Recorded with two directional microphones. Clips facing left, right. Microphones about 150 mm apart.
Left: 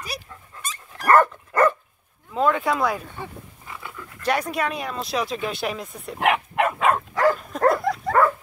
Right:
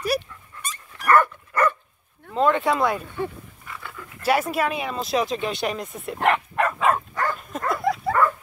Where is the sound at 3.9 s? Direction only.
5° right (ahead or behind); by 6.8 s 10° left (ahead or behind).